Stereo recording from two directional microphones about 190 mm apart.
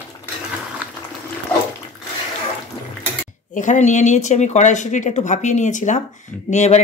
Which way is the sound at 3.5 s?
40° left (ahead or behind).